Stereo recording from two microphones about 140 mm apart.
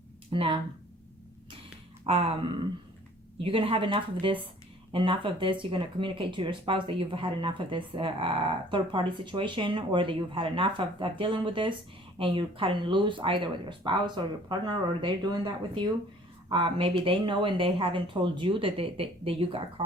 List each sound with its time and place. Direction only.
0.3 s speech: 40° right (ahead or behind)
2.0 s speech: 40° right (ahead or behind)